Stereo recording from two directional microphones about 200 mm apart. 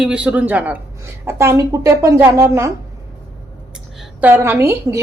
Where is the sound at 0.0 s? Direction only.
5° right (ahead or behind).